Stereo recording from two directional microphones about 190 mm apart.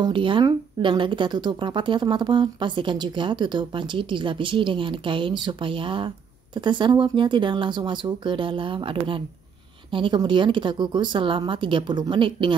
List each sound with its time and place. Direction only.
0.0 s speech: 25° right (ahead or behind)